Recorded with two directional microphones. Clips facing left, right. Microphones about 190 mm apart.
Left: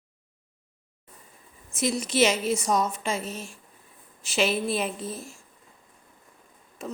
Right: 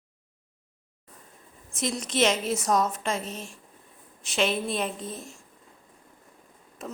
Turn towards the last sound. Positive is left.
turn(degrees=0)  # may be behind; listen again after turning